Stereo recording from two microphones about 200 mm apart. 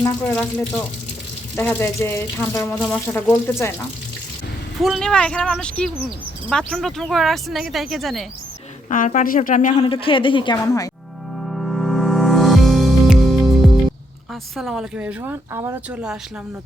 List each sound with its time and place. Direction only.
0.3 s speech: 5° left (ahead or behind)
2.6 s speech: centre (ahead or behind)
4.8 s speech: centre (ahead or behind)
8.9 s speech: 40° left (ahead or behind)
9.8 s a woman's voice: 25° left (ahead or behind)
11.4 s music: centre (ahead or behind)
14.5 s speech: centre (ahead or behind)